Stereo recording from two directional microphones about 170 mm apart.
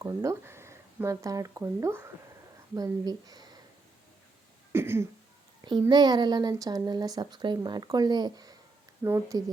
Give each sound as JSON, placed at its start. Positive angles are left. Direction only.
{"t": 0.0, "sound": "speech", "side_deg": -20}
{"t": 4.7, "sound": "a sound", "side_deg": -15}
{"t": 5.9, "sound": "speech", "side_deg": -25}